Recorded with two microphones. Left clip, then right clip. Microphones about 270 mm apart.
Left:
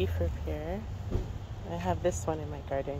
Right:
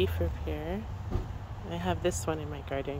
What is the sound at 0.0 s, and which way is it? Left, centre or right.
Speech, centre.